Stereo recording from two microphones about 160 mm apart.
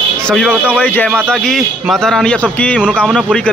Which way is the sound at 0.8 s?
10° left (ahead or behind).